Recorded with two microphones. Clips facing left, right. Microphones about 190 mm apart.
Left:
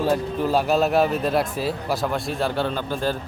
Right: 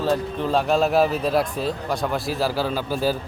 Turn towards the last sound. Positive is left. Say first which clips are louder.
# right 2 dB
turn(degrees=-5)  # may be behind; listen again after turning